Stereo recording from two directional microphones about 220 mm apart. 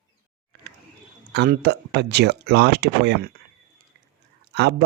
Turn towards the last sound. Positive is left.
turn(degrees=-50)  # may be behind; listen again after turning